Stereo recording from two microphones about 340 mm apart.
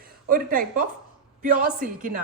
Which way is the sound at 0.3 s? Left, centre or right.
Right.